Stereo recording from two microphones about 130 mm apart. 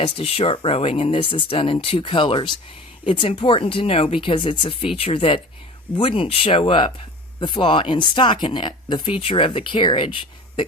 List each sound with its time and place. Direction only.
0.0 s speech: 45° left (ahead or behind)